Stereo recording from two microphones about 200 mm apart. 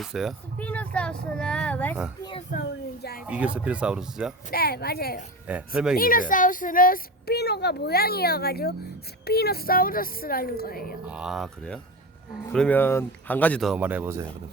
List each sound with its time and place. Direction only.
0.0 s speech: centre (ahead or behind)
2.5 s speech: 50° left (ahead or behind)
3.2 s speech: 5° right (ahead or behind)
4.5 s speech: 50° left (ahead or behind)
5.5 s speech: 5° right (ahead or behind)
6.0 s speech: 45° left (ahead or behind)
11.0 s speech: 5° right (ahead or behind)